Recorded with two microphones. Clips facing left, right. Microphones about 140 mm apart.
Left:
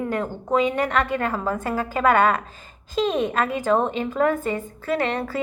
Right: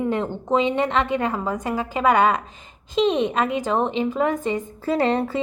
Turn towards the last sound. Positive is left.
turn(degrees=-30)  # may be behind; listen again after turning